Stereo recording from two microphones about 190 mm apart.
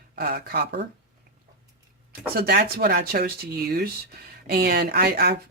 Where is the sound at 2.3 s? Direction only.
55° right (ahead or behind).